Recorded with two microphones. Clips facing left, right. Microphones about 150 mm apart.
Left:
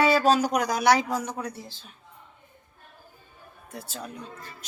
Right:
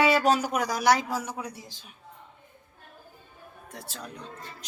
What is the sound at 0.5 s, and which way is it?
A woman's voice, centre (ahead or behind).